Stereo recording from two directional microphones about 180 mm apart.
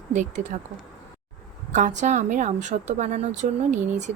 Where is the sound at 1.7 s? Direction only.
45° right (ahead or behind).